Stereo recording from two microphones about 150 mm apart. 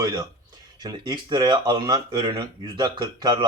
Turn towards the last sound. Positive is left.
turn(degrees=-30)  # may be behind; listen again after turning